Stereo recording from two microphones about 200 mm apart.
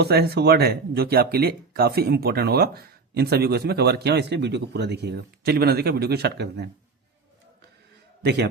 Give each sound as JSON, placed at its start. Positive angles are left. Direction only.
{"t": 0.0, "sound": "speech", "side_deg": -55}
{"t": 8.2, "sound": "a man's voice", "side_deg": -55}